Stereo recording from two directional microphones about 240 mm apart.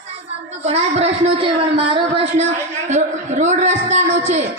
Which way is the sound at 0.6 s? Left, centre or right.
Right.